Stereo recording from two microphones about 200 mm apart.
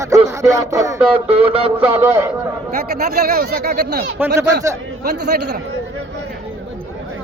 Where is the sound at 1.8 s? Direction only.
10° right (ahead or behind).